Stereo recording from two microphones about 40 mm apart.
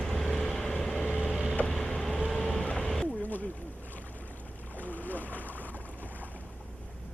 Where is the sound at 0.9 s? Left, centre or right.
Left.